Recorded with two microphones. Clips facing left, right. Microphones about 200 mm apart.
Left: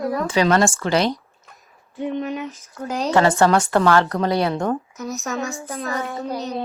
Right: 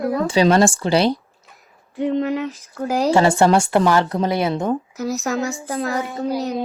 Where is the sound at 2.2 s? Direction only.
65° right (ahead or behind).